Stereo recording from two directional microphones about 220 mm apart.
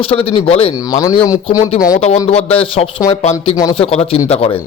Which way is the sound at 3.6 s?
20° left (ahead or behind).